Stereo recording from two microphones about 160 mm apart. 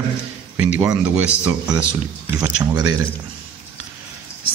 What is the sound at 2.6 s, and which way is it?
Speech, 25° right (ahead or behind).